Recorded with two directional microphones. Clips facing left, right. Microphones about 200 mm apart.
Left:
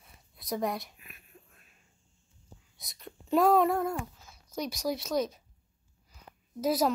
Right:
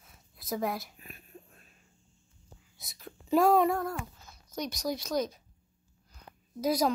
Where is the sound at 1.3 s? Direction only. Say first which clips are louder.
Right 7 dB; 30° right (ahead or behind).